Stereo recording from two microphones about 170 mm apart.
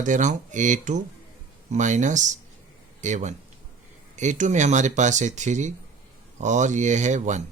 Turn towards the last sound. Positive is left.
turn(degrees=-45)  # may be behind; listen again after turning